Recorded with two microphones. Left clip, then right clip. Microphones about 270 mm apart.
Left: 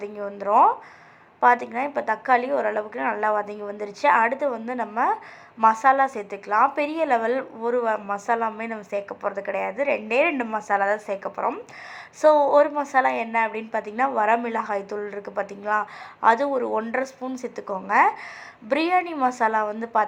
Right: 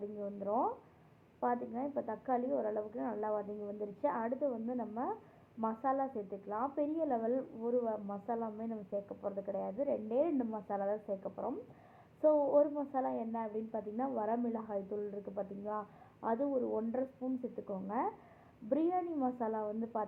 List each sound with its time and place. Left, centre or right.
0.2 s a woman's voice: left